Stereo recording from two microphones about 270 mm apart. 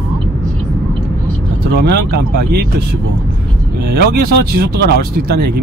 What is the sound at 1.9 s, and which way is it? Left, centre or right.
Speech, right.